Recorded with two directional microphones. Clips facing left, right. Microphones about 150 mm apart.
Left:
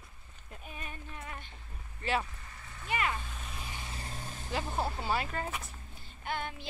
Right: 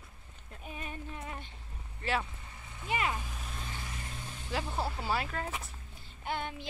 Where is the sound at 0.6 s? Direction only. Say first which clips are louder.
Right 4 dB; 20° right (ahead or behind).